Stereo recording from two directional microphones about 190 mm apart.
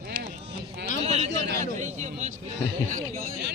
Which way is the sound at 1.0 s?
35° right (ahead or behind).